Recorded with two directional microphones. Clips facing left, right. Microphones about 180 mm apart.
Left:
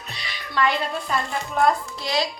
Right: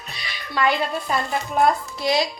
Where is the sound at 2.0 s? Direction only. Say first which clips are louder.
Right 4 dB; 15° right (ahead or behind).